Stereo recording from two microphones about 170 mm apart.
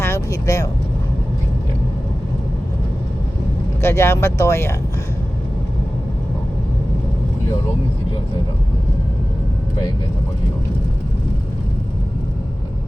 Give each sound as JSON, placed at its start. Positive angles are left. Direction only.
{"t": 0.0, "sound": "vehicle", "side_deg": 15}
{"t": 3.8, "sound": "speech", "side_deg": 15}